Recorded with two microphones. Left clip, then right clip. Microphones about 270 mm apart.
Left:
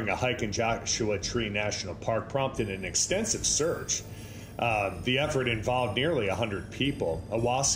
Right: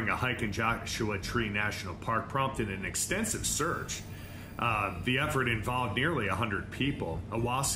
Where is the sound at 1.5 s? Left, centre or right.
Right.